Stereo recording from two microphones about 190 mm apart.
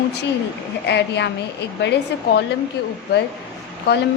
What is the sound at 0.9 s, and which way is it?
A woman's voice, 65° left (ahead or behind).